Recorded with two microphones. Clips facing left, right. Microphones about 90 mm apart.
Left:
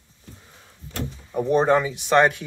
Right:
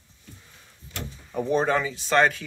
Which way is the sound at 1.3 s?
10° left (ahead or behind).